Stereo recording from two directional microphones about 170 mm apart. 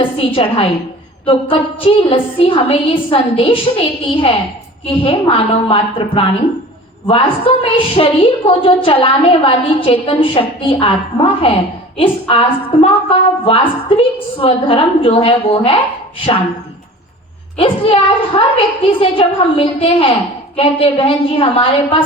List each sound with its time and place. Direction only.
0.3 s a woman's voice: 35° left (ahead or behind)
17.6 s a woman's voice: 35° left (ahead or behind)